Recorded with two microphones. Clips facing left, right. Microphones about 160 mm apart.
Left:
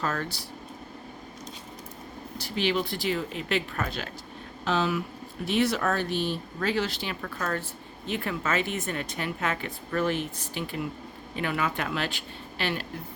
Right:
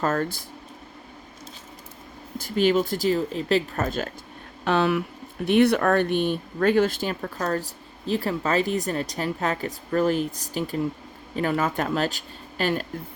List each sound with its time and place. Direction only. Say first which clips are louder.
0.0 s speech: right 6 dB; 45° right (ahead or behind)
2.4 s speech: right 7 dB; 45° right (ahead or behind)
4.6 s speech: right 5 dB; 60° right (ahead or behind); by 12.8 s 45° right (ahead or behind)